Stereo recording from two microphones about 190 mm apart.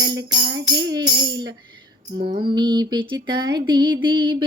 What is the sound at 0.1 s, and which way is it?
Music, 20° right (ahead or behind).